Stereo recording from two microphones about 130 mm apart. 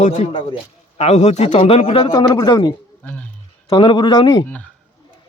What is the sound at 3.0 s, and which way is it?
Speech, 10° left (ahead or behind).